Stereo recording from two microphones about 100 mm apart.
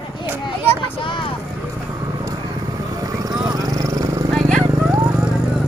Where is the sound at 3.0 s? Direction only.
35° right (ahead or behind).